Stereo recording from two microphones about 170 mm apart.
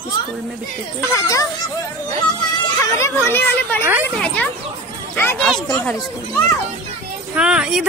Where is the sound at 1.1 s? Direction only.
20° left (ahead or behind).